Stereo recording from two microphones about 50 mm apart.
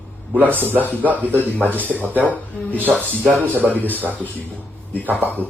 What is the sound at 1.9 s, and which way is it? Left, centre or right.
Speech, left.